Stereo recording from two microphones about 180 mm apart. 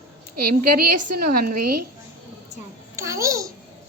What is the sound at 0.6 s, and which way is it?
Speech, 55° right (ahead or behind).